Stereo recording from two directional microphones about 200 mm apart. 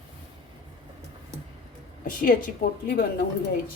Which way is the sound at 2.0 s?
45° left (ahead or behind).